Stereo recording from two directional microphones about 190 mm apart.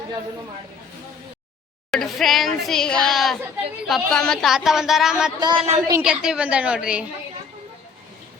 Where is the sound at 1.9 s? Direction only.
Centre (ahead or behind).